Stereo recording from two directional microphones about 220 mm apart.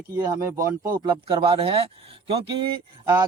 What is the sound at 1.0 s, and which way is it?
A man's voice, 20° right (ahead or behind).